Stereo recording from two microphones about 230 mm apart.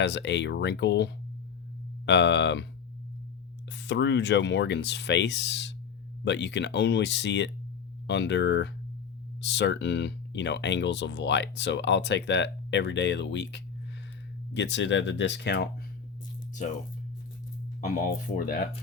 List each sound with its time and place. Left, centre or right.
0.0 s speech: left
3.7 s speech: left
17.7 s speech: left